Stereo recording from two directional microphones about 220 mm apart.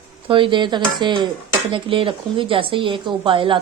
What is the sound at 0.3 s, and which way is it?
Speech, 25° right (ahead or behind).